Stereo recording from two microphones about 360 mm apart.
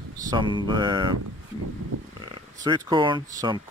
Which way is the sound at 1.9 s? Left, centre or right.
Right.